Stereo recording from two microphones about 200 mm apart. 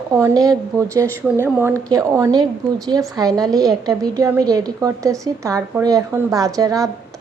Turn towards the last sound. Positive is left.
turn(degrees=-15)  # may be behind; listen again after turning